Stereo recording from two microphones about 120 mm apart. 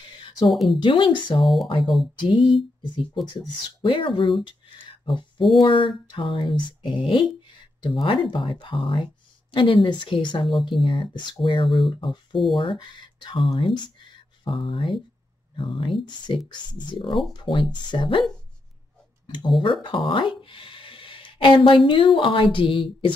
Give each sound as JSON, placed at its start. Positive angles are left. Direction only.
{"t": 0.5, "sound": "speech", "side_deg": 0}
{"t": 0.7, "sound": "speech", "side_deg": 45}
{"t": 1.4, "sound": "speech", "side_deg": 0}
{"t": 3.8, "sound": "speech", "side_deg": 45}
{"t": 4.5, "sound": "a sound", "side_deg": 45}
{"t": 5.6, "sound": "speech", "side_deg": 45}
{"t": 19.2, "sound": "speech", "side_deg": 40}